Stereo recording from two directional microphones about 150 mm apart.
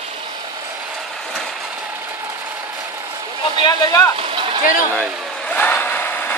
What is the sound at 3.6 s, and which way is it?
Speech, 20° left (ahead or behind).